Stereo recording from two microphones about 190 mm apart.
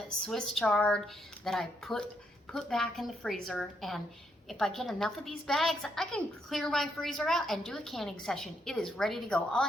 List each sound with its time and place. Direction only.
0.3 s a woman's voice: 5° left (ahead or behind)